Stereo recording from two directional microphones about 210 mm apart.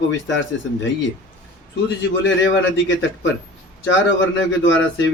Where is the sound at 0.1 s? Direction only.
60° left (ahead or behind).